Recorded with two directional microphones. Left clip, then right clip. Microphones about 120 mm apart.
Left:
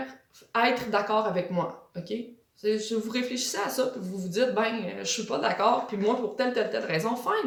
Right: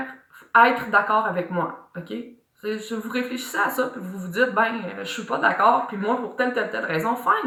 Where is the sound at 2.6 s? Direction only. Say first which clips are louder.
Left 2 dB; 30° left (ahead or behind).